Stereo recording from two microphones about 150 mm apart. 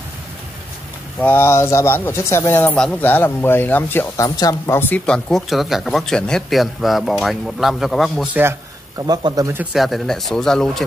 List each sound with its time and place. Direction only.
1.2 s speech: 15° left (ahead or behind); by 8.3 s centre (ahead or behind)
8.3 s speech: 15° right (ahead or behind)
9.6 s speech: 5° right (ahead or behind)